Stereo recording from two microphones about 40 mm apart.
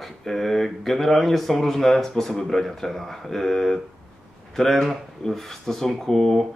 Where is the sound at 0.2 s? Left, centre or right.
Centre.